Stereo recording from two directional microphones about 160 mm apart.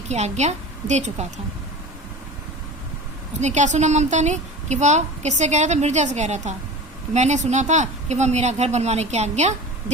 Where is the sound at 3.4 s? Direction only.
50° right (ahead or behind).